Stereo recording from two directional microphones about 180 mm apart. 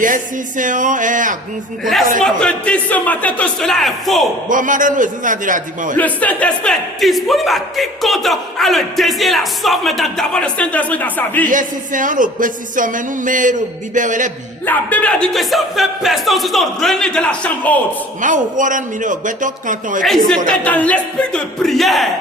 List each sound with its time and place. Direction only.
0.0 s speech: 45° right (ahead or behind)
1.8 s speech: centre (ahead or behind)
4.4 s speech: 45° right (ahead or behind)
6.0 s speech: 10° left (ahead or behind)
11.4 s speech: 45° right (ahead or behind)
14.7 s speech: 10° left (ahead or behind)
18.2 s speech: 45° right (ahead or behind)
20.5 s speech: 10° left (ahead or behind)